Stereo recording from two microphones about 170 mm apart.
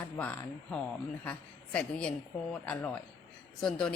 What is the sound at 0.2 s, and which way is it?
A woman's voice, 10° left (ahead or behind).